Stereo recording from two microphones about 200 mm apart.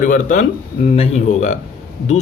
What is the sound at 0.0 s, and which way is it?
Speech, 40° left (ahead or behind).